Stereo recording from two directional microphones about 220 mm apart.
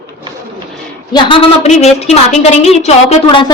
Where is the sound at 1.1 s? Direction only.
25° left (ahead or behind).